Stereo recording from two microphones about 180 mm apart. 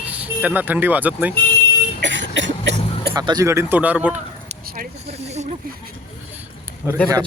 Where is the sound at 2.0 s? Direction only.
85° right.